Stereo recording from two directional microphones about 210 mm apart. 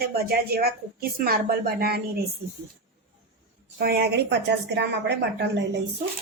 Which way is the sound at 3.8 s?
50° right (ahead or behind).